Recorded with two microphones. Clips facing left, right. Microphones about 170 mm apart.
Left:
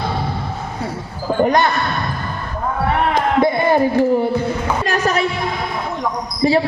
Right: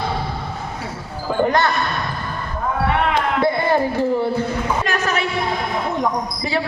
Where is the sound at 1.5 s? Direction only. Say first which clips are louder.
Left 3 dB; 15° left (ahead or behind).